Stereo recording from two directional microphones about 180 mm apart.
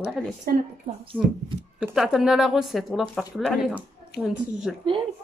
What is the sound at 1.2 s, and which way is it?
A woman's voice, 5° right (ahead or behind).